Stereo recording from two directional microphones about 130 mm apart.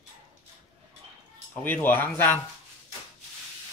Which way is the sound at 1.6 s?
15° left (ahead or behind).